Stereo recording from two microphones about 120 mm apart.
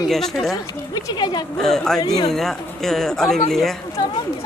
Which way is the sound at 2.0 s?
30° left (ahead or behind).